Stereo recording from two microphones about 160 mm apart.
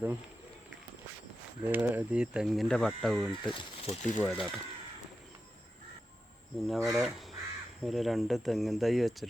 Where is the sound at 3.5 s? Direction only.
40° left (ahead or behind).